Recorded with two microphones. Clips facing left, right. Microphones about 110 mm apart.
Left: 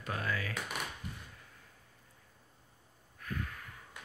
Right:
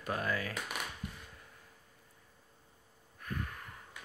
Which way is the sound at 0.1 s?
30° right (ahead or behind).